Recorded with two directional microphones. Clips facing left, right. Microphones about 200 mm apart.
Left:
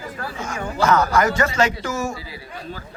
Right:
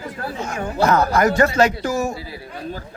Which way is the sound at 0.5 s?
35° right (ahead or behind).